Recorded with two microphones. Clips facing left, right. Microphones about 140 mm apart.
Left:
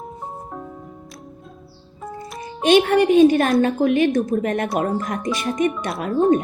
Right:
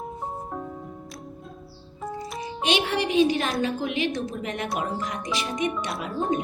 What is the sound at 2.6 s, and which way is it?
A woman's voice, 50° left (ahead or behind).